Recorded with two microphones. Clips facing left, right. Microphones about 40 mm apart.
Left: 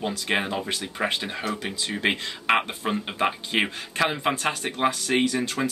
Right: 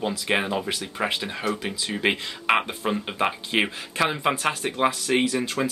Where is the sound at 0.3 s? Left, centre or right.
Centre.